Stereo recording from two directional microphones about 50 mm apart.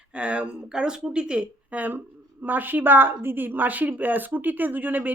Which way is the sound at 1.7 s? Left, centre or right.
Right.